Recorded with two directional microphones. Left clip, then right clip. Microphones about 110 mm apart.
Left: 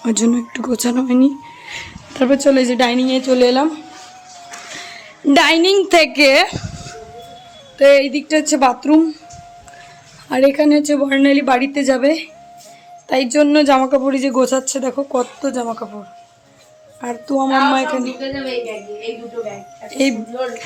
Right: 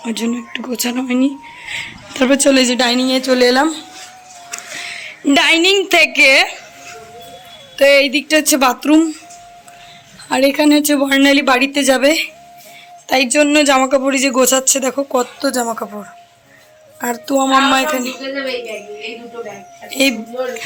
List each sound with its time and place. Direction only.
0.0 s speech: 85° left; by 1.9 s 35° left (ahead or behind)
2.1 s speech: 15° left (ahead or behind)
4.9 s music: 25° left (ahead or behind)
5.9 s a woman's voice: 40° left (ahead or behind)
7.8 s speech: centre (ahead or behind)
10.2 s a woman's voice: 25° left (ahead or behind)
10.5 s speech: 5° left (ahead or behind)
13.1 s speech: 30° left (ahead or behind); by 15.6 s centre (ahead or behind)
15.6 s speech: 20° right (ahead or behind)
17.0 s speech: 5° right (ahead or behind)
19.9 s speech: 20° left (ahead or behind)